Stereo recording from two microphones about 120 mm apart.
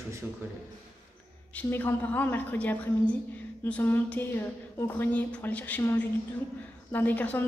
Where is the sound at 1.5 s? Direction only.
15° left (ahead or behind).